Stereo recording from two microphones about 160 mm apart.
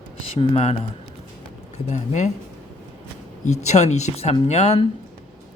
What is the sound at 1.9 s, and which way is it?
Speech, 50° left (ahead or behind).